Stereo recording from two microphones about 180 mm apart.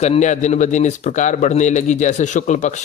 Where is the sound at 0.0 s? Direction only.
40° left (ahead or behind).